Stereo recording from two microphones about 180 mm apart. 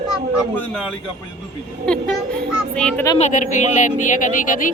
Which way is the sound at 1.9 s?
5° left (ahead or behind).